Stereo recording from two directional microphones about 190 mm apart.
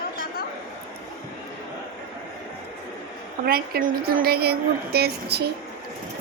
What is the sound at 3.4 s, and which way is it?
A woman's voice, 50° right (ahead or behind).